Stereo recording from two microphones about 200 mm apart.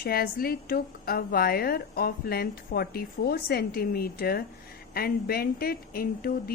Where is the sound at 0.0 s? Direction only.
50° left (ahead or behind).